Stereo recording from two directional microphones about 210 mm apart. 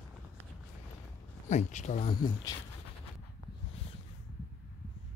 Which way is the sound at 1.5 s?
35° left (ahead or behind).